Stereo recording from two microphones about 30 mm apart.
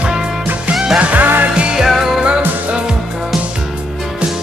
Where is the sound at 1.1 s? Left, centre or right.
Right.